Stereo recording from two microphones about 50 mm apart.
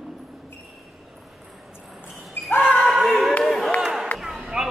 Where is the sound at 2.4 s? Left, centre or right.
Left.